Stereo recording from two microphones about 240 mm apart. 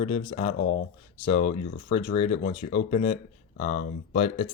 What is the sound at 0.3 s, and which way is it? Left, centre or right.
Speech, left.